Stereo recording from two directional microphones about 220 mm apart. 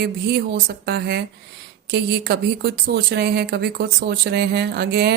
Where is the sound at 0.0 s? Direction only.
45° right (ahead or behind).